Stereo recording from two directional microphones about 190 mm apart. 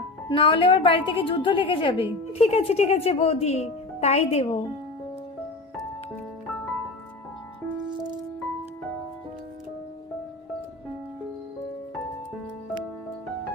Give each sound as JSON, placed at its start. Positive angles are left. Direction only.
{"t": 0.3, "sound": "a woman's voice", "side_deg": 25}